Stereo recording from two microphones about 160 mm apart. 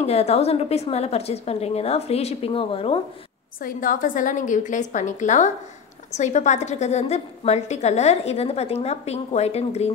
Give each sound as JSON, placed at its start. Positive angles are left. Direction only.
{"t": 0.0, "sound": "a woman's voice", "side_deg": 40}
{"t": 3.6, "sound": "a woman's voice", "side_deg": 55}